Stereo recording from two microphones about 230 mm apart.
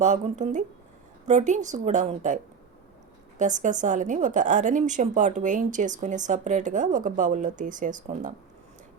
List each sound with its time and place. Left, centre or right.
0.0 s speech: right